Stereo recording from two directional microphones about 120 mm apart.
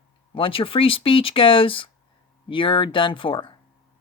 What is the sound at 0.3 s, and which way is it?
Speech, 50° left (ahead or behind).